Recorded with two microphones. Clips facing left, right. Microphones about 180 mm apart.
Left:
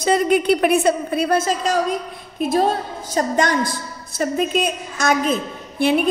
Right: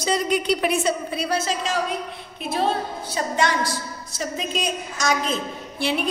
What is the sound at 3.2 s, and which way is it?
A woman's voice, 50° left (ahead or behind).